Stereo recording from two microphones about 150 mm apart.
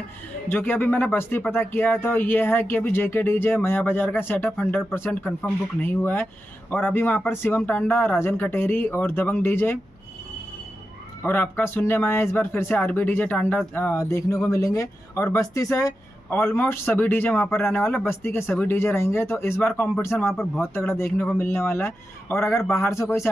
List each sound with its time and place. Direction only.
0.5 s speech: 15° left (ahead or behind)
11.2 s speech: 15° left (ahead or behind)
20.2 s speech: centre (ahead or behind)
20.7 s speech: 15° left (ahead or behind)